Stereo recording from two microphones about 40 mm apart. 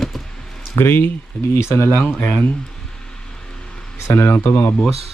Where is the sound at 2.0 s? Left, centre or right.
Left.